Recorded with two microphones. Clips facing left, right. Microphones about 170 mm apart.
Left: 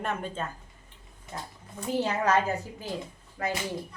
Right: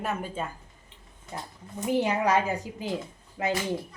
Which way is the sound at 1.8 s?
15° right (ahead or behind).